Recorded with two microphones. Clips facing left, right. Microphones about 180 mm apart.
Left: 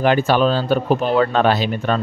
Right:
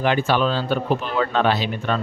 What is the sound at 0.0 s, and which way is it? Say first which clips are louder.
Speech: left 4 dB; 40° left (ahead or behind).